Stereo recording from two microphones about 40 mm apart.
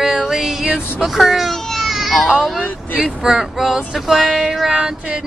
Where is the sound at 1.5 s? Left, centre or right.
Centre.